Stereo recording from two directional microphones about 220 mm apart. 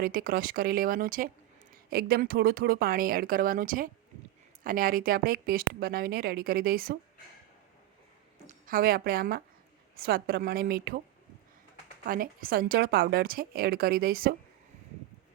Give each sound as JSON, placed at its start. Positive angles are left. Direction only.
{"t": 0.0, "sound": "speech", "side_deg": -40}
{"t": 8.4, "sound": "a woman's voice", "side_deg": -40}
{"t": 12.0, "sound": "a woman's voice", "side_deg": -40}